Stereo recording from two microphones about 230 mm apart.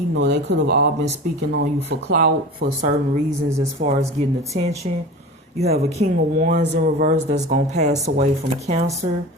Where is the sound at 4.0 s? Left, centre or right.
Centre.